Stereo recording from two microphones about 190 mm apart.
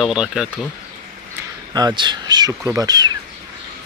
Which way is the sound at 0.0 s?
5° right (ahead or behind).